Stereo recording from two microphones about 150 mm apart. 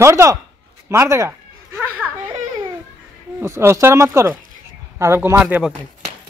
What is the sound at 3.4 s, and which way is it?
Speech, 20° right (ahead or behind).